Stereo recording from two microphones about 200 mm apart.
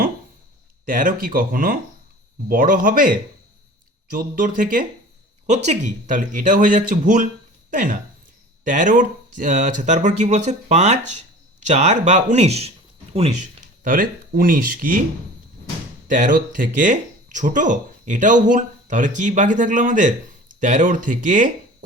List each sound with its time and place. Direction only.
0.9 s speech: 40° right (ahead or behind)
4.1 s speech: 40° right (ahead or behind)
13.8 s speech: 45° right (ahead or behind)
16.0 s speech: 40° right (ahead or behind)